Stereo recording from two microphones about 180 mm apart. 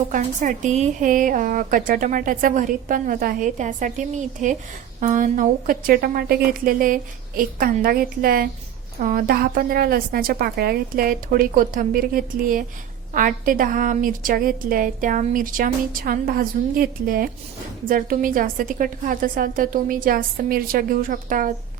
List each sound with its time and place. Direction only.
0.1 s a woman's voice: 45° right (ahead or behind)